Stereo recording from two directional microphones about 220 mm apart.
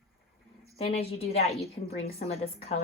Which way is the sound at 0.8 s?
25° left (ahead or behind).